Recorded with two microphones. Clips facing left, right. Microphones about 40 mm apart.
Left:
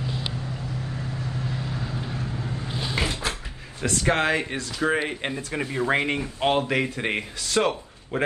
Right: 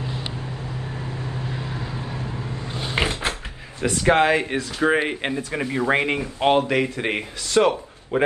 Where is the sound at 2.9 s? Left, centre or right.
Right.